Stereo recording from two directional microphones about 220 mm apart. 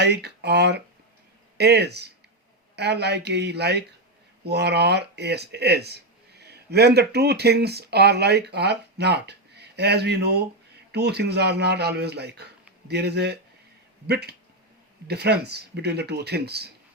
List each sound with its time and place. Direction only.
0.0 s speech: 50° right (ahead or behind)